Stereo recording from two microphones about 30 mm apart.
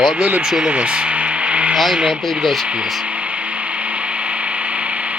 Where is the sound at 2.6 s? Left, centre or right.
Right.